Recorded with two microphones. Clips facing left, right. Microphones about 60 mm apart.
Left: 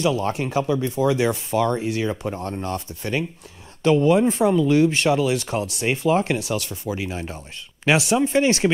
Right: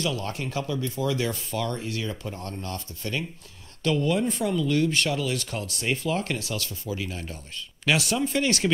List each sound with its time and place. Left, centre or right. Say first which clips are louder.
0.0 s speech: left 8 dB; left